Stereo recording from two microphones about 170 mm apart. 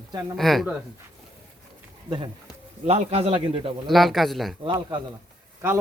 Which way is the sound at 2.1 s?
25° right (ahead or behind).